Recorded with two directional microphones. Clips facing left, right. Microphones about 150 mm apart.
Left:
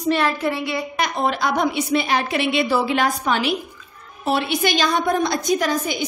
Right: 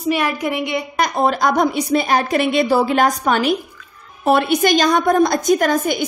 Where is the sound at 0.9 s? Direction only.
45° right (ahead or behind).